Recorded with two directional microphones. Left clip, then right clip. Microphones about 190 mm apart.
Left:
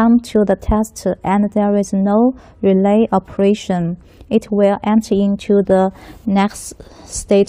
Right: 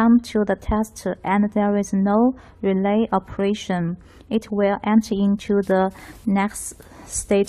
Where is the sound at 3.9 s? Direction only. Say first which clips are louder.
Left 5 dB; 20° right (ahead or behind).